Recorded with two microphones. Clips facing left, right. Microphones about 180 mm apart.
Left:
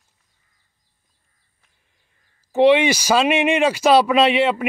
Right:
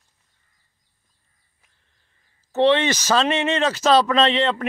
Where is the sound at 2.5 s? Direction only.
10° left (ahead or behind).